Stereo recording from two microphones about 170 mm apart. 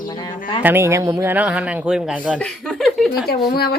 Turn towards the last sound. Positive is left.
turn(degrees=65)  # may be behind; listen again after turning